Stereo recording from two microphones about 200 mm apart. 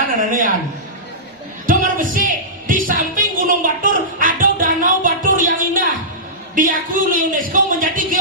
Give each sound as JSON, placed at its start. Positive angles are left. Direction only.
{"t": 0.2, "sound": "a man's voice", "side_deg": -40}
{"t": 1.6, "sound": "music", "side_deg": -45}
{"t": 6.6, "sound": "a sound", "side_deg": -40}